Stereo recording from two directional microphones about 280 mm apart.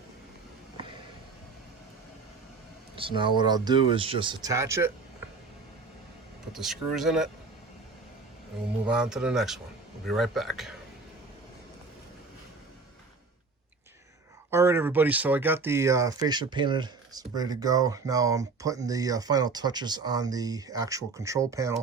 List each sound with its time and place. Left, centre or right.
2.9 s a sound: centre
3.3 s speech: centre
6.5 s speech: centre
8.9 s speech: centre
14.5 s speech: centre